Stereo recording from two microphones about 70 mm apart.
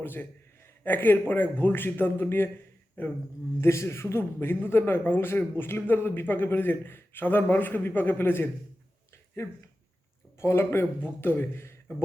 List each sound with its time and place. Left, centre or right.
0.0 s a man's voice: left
3.6 s a man's voice: left